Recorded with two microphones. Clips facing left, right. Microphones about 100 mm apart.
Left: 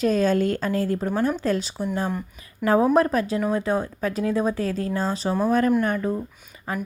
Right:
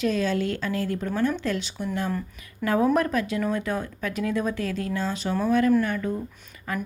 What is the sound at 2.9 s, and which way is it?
Speech, 35° left (ahead or behind).